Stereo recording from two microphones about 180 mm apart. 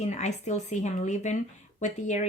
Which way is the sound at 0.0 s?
40° left (ahead or behind).